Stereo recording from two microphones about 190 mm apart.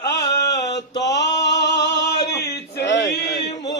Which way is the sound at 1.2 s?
65° left (ahead or behind).